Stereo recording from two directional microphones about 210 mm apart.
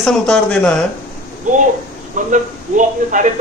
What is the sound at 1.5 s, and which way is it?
Speech, 40° right (ahead or behind).